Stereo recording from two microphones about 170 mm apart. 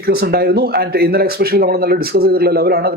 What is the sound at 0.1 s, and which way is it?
Speech, 65° right (ahead or behind).